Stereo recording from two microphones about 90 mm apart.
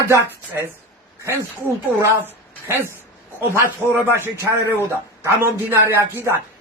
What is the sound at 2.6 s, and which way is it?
Speech, 25° right (ahead or behind).